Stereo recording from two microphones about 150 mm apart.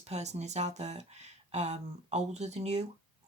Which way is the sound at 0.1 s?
50° right (ahead or behind).